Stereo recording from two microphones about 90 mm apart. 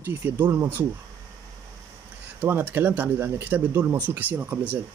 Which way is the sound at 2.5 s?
25° right (ahead or behind).